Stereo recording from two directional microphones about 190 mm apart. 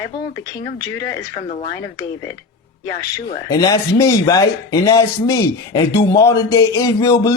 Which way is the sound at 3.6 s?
15° left (ahead or behind).